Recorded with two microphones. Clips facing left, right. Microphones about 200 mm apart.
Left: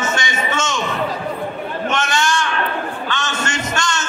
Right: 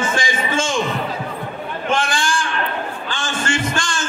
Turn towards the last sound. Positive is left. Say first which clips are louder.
# even
turn(degrees=-30)  # may be behind; listen again after turning